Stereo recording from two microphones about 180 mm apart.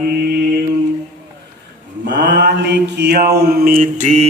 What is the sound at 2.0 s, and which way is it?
Mantra, 75° right (ahead or behind).